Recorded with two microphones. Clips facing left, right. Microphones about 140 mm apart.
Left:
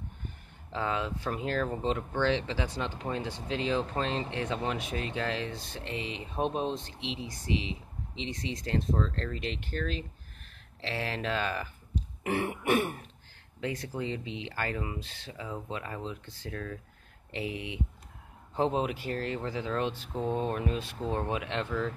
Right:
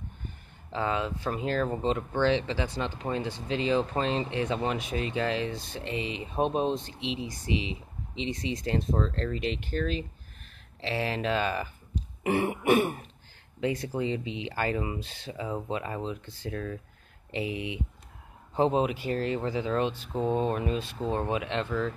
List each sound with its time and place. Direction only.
0.7 s speech: centre (ahead or behind)
15.3 s speech: 20° right (ahead or behind); by 21.9 s centre (ahead or behind)